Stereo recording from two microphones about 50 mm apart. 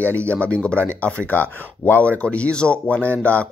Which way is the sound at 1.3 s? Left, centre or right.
Left.